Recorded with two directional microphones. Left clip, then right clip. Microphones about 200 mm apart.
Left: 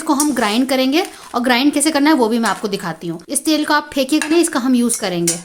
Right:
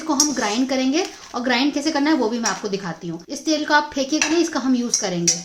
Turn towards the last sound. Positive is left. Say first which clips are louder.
# left 4 dB
turn(degrees=45)  # may be behind; listen again after turning